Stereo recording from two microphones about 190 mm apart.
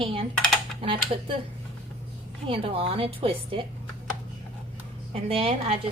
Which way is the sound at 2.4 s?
30° right (ahead or behind).